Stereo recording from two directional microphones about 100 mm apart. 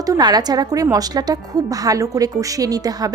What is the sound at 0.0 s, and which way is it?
A woman's voice, 40° right (ahead or behind).